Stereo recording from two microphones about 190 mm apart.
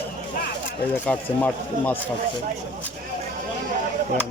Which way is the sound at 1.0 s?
10° left (ahead or behind).